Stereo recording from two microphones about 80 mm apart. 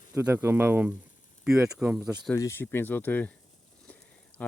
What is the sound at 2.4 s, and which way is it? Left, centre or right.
Speech, left.